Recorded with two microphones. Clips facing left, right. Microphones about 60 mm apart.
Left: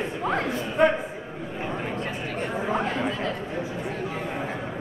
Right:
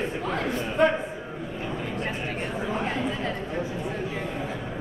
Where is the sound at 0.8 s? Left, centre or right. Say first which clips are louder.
Left 1 dB; centre.